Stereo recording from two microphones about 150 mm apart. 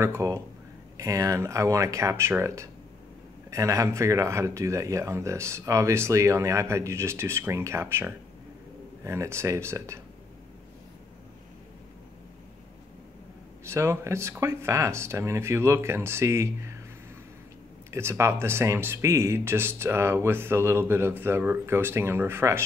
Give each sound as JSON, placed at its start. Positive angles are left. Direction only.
{"t": 0.0, "sound": "speech", "side_deg": -20}
{"t": 13.7, "sound": "speech", "side_deg": -20}
{"t": 17.9, "sound": "speech", "side_deg": -15}